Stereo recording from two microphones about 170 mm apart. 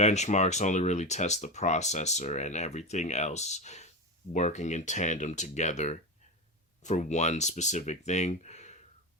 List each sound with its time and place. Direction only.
0.0 s speech: 40° left (ahead or behind)